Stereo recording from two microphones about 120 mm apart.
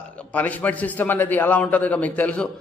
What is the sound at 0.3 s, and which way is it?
A man's voice, 10° left (ahead or behind).